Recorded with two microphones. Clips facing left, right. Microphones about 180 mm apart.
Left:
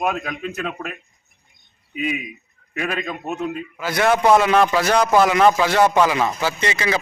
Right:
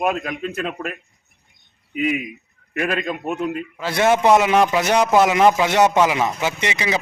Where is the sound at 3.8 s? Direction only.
25° right (ahead or behind).